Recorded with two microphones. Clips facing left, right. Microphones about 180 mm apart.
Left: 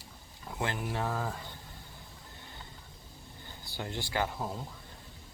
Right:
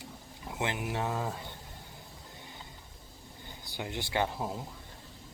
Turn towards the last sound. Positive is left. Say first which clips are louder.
# right 2 dB
turn(degrees=-10)  # may be behind; listen again after turning